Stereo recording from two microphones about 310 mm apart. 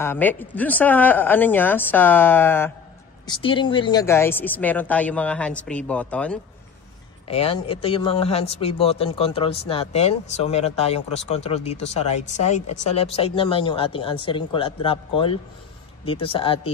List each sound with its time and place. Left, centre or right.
0.0 s speech: centre
7.2 s speech: centre